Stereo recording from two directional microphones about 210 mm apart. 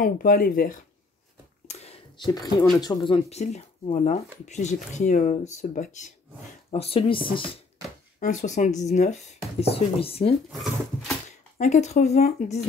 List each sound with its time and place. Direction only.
0.0 s speech: 45° left (ahead or behind)
1.7 s speech: 30° left (ahead or behind)
8.2 s speech: 35° left (ahead or behind)
10.6 s a sound: centre (ahead or behind)
11.2 s speech: 35° left (ahead or behind)